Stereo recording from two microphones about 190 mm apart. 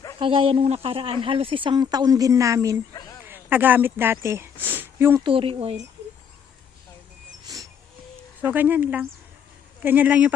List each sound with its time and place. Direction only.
0.2 s speech: 25° right (ahead or behind); by 5.2 s 10° right (ahead or behind)
5.2 s speech: 30° right (ahead or behind)
8.4 s speech: 10° right (ahead or behind)